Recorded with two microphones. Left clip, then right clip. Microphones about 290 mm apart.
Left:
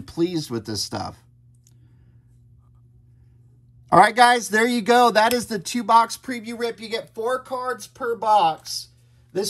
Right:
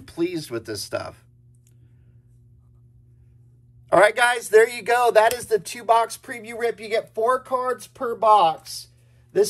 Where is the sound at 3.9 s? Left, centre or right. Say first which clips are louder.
Left 3 dB; centre.